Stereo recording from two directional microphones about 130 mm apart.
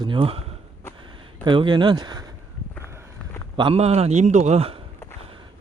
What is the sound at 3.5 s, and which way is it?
A man's voice, 45° right (ahead or behind).